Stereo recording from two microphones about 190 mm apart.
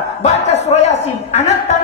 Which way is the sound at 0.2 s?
35° left (ahead or behind).